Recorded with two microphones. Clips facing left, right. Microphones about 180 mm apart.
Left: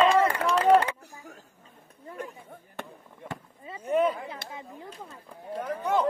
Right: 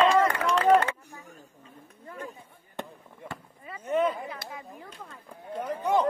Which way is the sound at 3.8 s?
10° left (ahead or behind).